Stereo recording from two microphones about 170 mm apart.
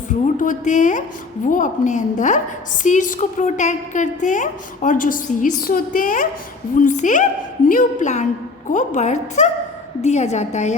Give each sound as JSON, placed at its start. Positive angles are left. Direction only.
{"t": 0.1, "sound": "a woman's voice", "side_deg": 50}